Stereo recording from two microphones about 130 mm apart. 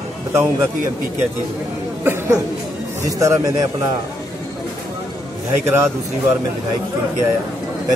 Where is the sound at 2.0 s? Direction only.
20° right (ahead or behind).